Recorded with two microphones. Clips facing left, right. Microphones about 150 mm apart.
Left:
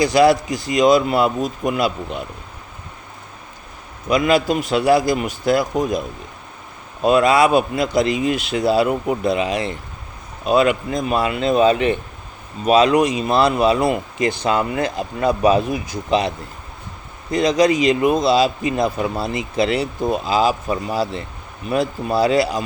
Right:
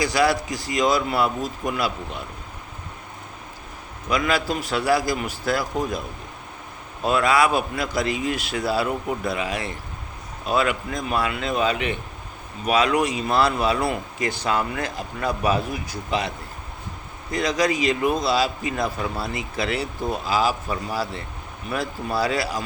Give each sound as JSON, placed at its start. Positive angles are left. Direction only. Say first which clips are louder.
{"t": 0.0, "sound": "speech", "louder": "left 7 dB", "side_deg": 25}
{"t": 4.1, "sound": "speech", "louder": "left 7 dB", "side_deg": 20}
{"t": 7.0, "sound": "speech", "louder": "left 6 dB", "side_deg": 20}
{"t": 17.3, "sound": "speech", "louder": "left 7 dB", "side_deg": 20}